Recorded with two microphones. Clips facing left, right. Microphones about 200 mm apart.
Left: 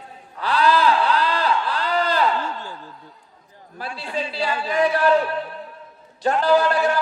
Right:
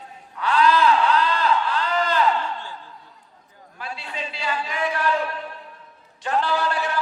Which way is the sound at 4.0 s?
35° left (ahead or behind).